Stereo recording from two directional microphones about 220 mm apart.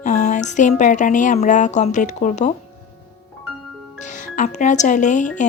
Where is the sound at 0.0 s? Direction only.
35° left (ahead or behind).